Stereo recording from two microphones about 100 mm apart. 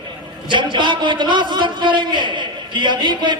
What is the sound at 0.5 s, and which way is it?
Speech, 55° right (ahead or behind).